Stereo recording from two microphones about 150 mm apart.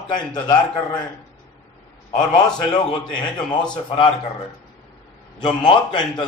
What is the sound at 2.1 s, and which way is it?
A man's voice, 30° left (ahead or behind).